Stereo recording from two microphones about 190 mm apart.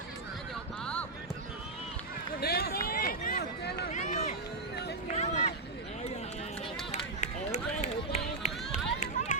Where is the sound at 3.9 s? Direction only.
35° left (ahead or behind).